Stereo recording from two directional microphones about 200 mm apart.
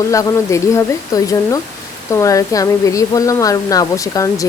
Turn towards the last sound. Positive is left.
turn(degrees=15)  # may be behind; listen again after turning